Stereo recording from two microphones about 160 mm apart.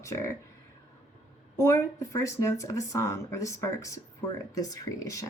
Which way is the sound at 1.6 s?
20° left (ahead or behind).